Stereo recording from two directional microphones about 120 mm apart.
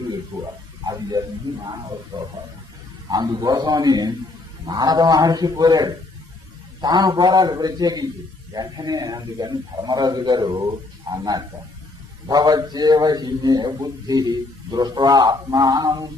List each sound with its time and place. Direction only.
1.2 s a man's voice: 35° right (ahead or behind)
3.1 s a man's voice: 35° right (ahead or behind)